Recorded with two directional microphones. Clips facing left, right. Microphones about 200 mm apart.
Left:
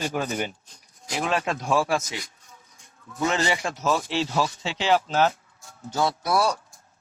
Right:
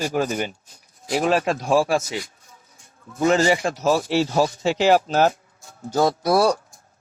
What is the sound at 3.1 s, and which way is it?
Speech, 40° right (ahead or behind).